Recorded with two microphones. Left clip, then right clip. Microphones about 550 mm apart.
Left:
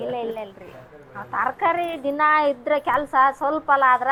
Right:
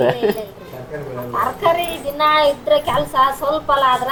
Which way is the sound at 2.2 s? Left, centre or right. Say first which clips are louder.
Right 5 dB; left.